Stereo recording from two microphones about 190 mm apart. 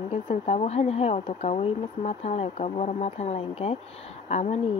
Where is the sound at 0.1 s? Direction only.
35° left (ahead or behind).